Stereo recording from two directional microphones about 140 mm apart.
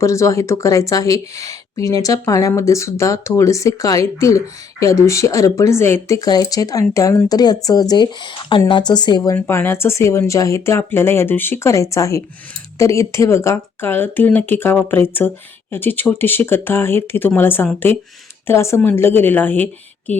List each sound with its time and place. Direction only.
0.0 s speech: 20° left (ahead or behind)
9.3 s speech: 15° left (ahead or behind)